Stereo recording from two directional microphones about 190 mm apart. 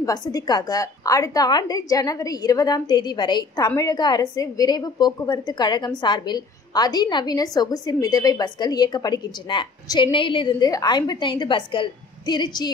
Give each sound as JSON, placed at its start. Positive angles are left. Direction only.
{"t": 0.0, "sound": "a woman's voice", "side_deg": 20}